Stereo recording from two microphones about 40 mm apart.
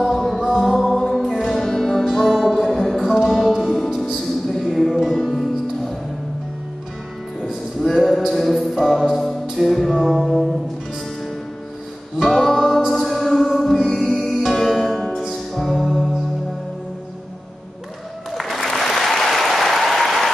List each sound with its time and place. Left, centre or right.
0.0 s music: centre
3.0 s music: centre
3.3 s music: centre
7.3 s music: centre
12.5 s music: centre
14.3 s music: centre
15.0 s music: centre
15.2 s music: centre
18.3 s applause: centre